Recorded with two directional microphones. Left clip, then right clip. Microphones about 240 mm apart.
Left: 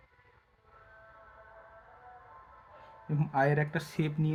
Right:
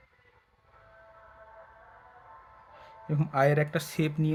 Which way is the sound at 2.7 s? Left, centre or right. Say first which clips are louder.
Right 3 dB; right.